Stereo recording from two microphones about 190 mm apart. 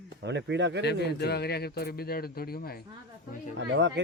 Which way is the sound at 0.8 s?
60° left (ahead or behind).